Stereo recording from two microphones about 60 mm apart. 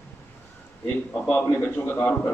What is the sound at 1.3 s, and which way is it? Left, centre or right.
A man's voice, left.